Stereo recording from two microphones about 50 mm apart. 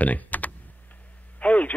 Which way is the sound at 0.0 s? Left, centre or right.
Left.